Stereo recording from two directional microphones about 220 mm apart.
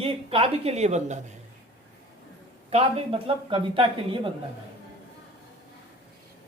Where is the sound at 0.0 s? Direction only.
25° right (ahead or behind).